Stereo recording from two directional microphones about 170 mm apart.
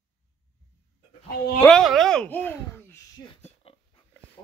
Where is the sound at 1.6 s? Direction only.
Centre (ahead or behind).